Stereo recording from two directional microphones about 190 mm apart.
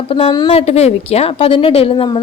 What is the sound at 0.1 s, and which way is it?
A woman's voice, 30° left (ahead or behind).